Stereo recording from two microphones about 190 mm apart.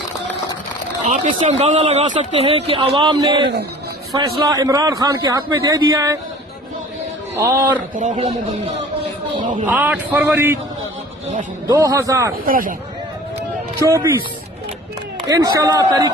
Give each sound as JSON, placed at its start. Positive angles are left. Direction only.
{"t": 1.0, "sound": "speech", "side_deg": -40}
{"t": 3.4, "sound": "speech", "side_deg": -60}
{"t": 4.1, "sound": "a man's voice", "side_deg": -20}
{"t": 7.3, "sound": "a man's voice", "side_deg": -10}
{"t": 7.9, "sound": "speech", "side_deg": -40}
{"t": 9.6, "sound": "a man's voice", "side_deg": -10}
{"t": 11.7, "sound": "a man's voice", "side_deg": -20}
{"t": 12.5, "sound": "speech", "side_deg": -45}
{"t": 15.2, "sound": "a man's voice", "side_deg": -20}